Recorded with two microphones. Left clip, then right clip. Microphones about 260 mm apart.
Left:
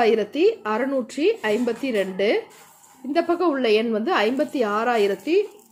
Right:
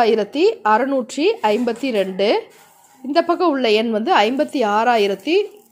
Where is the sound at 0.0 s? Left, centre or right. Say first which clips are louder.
Right 3 dB; centre.